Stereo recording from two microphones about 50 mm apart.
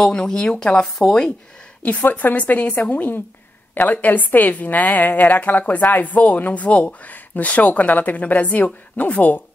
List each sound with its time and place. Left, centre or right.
0.0 s speech: centre
0.8 s speech: centre
2.0 s a woman's voice: left